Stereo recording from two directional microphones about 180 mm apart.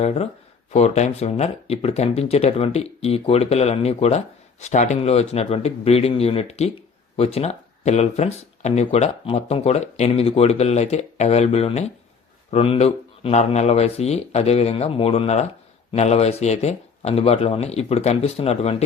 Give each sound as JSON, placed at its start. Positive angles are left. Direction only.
{"t": 0.0, "sound": "speech", "side_deg": 35}